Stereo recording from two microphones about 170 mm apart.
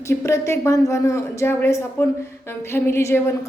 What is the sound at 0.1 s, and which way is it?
Speech, 15° left (ahead or behind).